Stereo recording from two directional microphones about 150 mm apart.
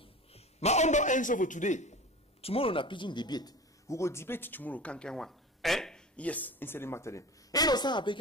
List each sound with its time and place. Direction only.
0.0 s a man's voice: 45° left (ahead or behind)
2.4 s speech: 40° left (ahead or behind)